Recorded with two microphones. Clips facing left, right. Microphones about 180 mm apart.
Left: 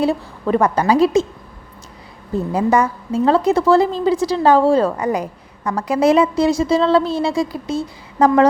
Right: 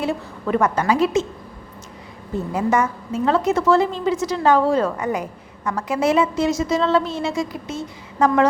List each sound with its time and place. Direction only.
0.0 s a woman's voice: 35° left (ahead or behind)
2.5 s a woman's voice: 35° left (ahead or behind)